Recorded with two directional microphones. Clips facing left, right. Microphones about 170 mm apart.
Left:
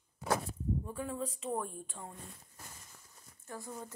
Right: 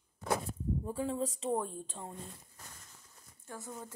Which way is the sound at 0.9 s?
30° right (ahead or behind).